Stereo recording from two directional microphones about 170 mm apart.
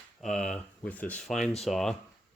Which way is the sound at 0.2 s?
Centre (ahead or behind).